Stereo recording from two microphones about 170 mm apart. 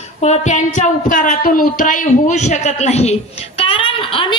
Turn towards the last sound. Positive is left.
turn(degrees=30)  # may be behind; listen again after turning